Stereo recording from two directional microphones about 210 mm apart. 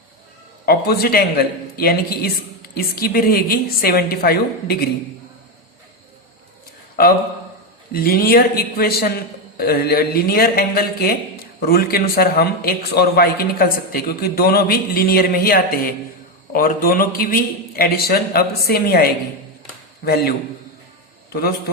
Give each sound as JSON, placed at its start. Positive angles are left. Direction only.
{"t": 0.6, "sound": "speech", "side_deg": 45}
{"t": 7.9, "sound": "speech", "side_deg": 45}